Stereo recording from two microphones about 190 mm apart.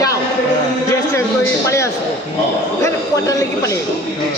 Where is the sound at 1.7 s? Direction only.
15° left (ahead or behind).